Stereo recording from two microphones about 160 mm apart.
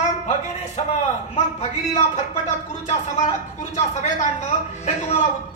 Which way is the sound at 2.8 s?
45° left (ahead or behind).